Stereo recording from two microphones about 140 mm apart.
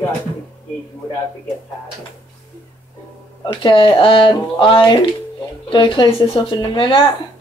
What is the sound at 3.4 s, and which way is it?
Speech, 35° left (ahead or behind).